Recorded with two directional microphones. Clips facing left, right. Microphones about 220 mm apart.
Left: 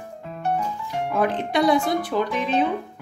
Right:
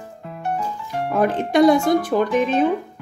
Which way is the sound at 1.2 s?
45° right (ahead or behind).